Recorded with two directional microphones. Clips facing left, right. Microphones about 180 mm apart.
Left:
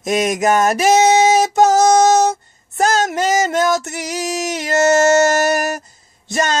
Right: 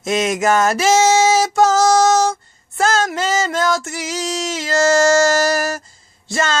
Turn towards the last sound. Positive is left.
turn(degrees=20)  # may be behind; listen again after turning